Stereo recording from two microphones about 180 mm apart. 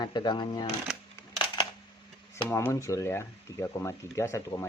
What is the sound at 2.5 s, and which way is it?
Speech, 15° left (ahead or behind).